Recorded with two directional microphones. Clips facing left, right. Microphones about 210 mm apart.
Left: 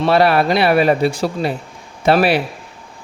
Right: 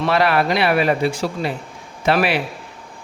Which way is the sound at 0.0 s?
30° left (ahead or behind).